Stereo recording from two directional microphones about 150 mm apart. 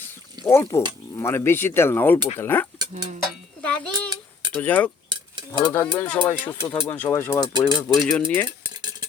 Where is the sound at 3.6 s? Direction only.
10° left (ahead or behind).